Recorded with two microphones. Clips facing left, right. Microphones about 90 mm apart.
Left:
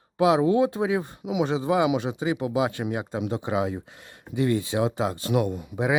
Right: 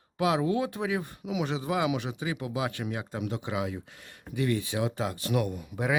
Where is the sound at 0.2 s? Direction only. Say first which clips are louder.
Left 7 dB; 25° left (ahead or behind).